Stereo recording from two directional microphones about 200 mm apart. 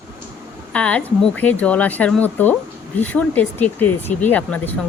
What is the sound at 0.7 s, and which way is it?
Speech, 5° left (ahead or behind).